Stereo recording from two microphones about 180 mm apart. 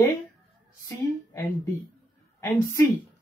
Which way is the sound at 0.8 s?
15° left (ahead or behind).